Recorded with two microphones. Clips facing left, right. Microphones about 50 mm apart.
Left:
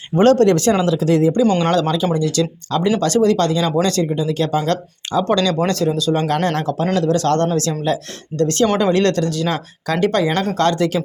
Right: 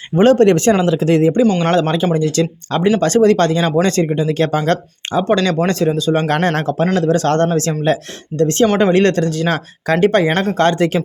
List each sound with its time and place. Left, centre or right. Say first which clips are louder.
0.2 s speech: right 2 dB; right
0.4 s speech: right 2 dB; right
5.6 s speech: right 2 dB; right
6.3 s speech: right 2 dB; right